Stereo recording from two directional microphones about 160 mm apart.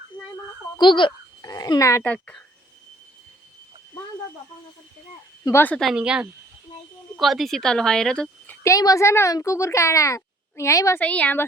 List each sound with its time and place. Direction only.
0.8 s a woman's voice: 30° left (ahead or behind); by 2.4 s 10° left (ahead or behind)
5.5 s a woman's voice: 15° left (ahead or behind)
5.9 s speech: 5° right (ahead or behind)
8.6 s speech: 20° left (ahead or behind)
11.0 s a woman's voice: 10° left (ahead or behind)